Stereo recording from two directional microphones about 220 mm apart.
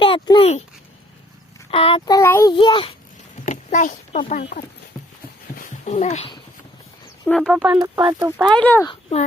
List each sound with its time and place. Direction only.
0.0 s a child's voice: 25° left (ahead or behind)
1.7 s a child's voice: 25° left (ahead or behind)
3.4 s speech: 35° left (ahead or behind)
5.5 s dog: 35° left (ahead or behind)
7.3 s speech: centre (ahead or behind)
7.6 s speech: 15° right (ahead or behind)
8.4 s speech: 5° left (ahead or behind)
8.9 s a child's voice: 25° left (ahead or behind)